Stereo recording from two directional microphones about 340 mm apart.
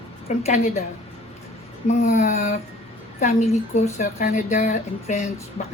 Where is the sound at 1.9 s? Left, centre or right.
Centre.